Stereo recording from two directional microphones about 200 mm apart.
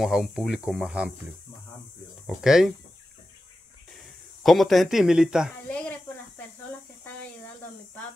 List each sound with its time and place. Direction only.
0.0 s speech: centre (ahead or behind)
2.2 s speech: centre (ahead or behind)
4.4 s speech: centre (ahead or behind)
5.7 s a sound: 5° left (ahead or behind)